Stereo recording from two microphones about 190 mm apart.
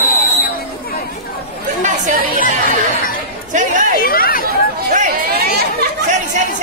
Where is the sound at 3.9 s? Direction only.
50° left (ahead or behind).